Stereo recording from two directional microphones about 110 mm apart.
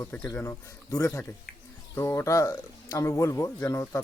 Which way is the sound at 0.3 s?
25° left (ahead or behind).